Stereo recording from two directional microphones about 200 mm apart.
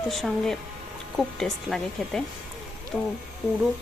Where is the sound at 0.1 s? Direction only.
Centre (ahead or behind).